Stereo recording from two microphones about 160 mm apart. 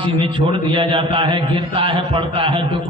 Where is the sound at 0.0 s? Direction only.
30° right (ahead or behind).